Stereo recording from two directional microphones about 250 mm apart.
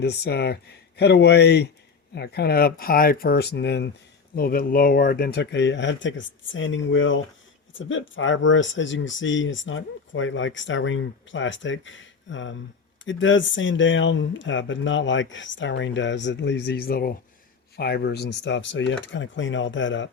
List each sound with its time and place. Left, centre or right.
0.0 s speech: left